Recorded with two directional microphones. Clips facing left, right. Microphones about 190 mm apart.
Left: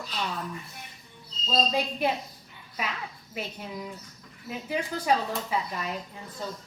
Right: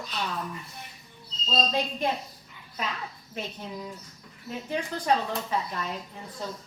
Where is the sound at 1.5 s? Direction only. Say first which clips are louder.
Left 1 dB; 10° left (ahead or behind).